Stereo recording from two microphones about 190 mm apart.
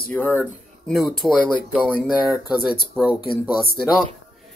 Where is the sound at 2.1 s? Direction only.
5° right (ahead or behind).